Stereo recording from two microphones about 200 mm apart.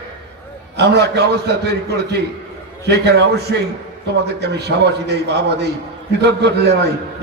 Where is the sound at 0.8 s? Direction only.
55° right (ahead or behind).